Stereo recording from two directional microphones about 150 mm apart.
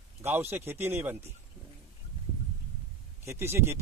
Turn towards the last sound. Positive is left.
turn(degrees=-15)  # may be behind; listen again after turning